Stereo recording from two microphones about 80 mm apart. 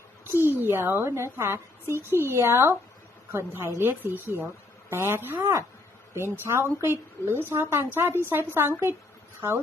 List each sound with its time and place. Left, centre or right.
0.3 s a woman's voice: right
5.4 s speech: right
6.1 s a woman's voice: right